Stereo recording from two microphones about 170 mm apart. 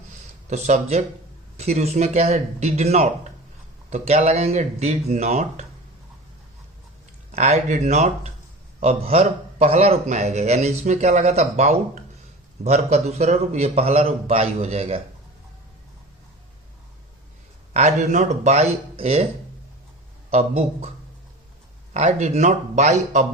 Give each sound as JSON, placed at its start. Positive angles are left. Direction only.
{"t": 0.5, "sound": "a man's voice", "side_deg": -40}
{"t": 7.3, "sound": "a man's voice", "side_deg": -40}
{"t": 17.7, "sound": "a man's voice", "side_deg": -45}
{"t": 20.3, "sound": "a man's voice", "side_deg": -40}
{"t": 21.9, "sound": "a man's voice", "side_deg": -40}